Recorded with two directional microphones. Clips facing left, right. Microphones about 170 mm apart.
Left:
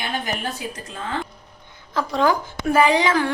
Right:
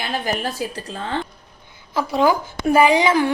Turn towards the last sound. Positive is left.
turn(degrees=-10)  # may be behind; listen again after turning